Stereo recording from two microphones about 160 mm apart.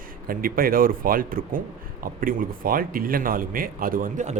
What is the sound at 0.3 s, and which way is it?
Speech, 65° right (ahead or behind).